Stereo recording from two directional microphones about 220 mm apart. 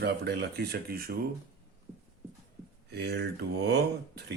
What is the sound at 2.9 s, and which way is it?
Speech, 50° right (ahead or behind).